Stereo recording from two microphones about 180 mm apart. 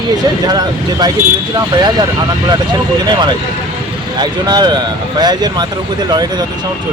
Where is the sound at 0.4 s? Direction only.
20° right (ahead or behind).